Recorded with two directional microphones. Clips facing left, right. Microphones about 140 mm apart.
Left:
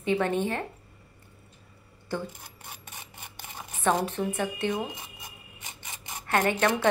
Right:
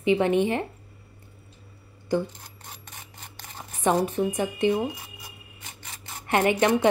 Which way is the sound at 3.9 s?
15° right (ahead or behind).